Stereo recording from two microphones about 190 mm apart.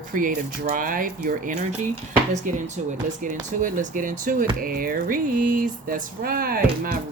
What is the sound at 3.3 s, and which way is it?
Speech, 45° right (ahead or behind).